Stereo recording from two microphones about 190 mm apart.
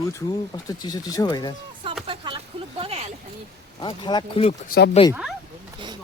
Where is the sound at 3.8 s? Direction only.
25° left (ahead or behind).